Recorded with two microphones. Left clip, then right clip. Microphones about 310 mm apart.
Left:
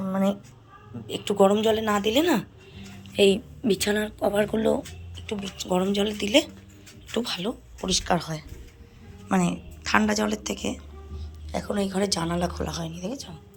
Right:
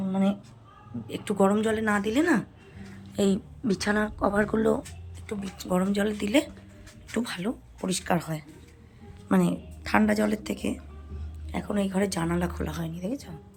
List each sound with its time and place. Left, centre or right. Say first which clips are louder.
1.0 s a woman's voice: left 4 dB; centre
3.2 s a woman's voice: left 7 dB; right